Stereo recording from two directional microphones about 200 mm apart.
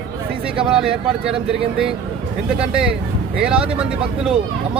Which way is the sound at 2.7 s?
5° right (ahead or behind).